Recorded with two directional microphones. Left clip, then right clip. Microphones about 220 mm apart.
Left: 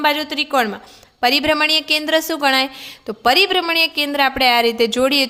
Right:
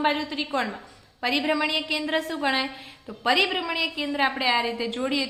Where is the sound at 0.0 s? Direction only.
45° left (ahead or behind).